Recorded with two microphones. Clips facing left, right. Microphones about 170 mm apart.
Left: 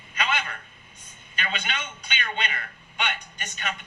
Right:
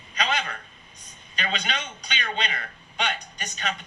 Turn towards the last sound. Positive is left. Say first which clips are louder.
# right 2 dB
turn(degrees=-35)  # may be behind; listen again after turning